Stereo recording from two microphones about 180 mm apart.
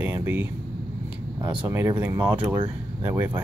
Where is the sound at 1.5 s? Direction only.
10° right (ahead or behind).